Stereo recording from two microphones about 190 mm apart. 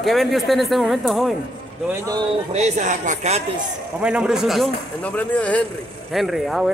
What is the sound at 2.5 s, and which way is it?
Speech, 40° right (ahead or behind).